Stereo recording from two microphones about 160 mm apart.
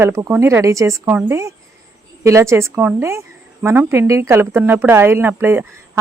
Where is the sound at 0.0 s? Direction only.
15° right (ahead or behind).